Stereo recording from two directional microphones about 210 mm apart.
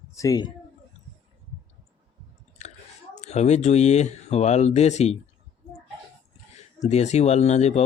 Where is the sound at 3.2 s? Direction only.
30° left (ahead or behind).